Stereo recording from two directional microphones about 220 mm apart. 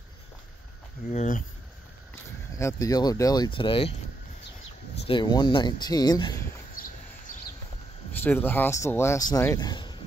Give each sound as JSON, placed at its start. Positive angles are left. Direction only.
{"t": 1.1, "sound": "speech", "side_deg": 35}
{"t": 2.5, "sound": "speech", "side_deg": 15}
{"t": 5.0, "sound": "speech", "side_deg": 20}
{"t": 6.8, "sound": "a sound", "side_deg": 40}
{"t": 8.2, "sound": "speech", "side_deg": 10}